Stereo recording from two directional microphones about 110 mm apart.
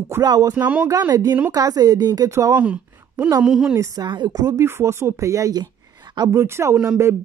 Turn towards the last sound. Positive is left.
turn(degrees=-25)  # may be behind; listen again after turning